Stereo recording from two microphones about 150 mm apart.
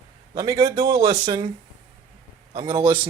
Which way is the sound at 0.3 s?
25° right (ahead or behind).